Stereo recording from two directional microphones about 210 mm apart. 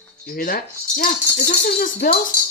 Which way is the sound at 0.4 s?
45° left (ahead or behind).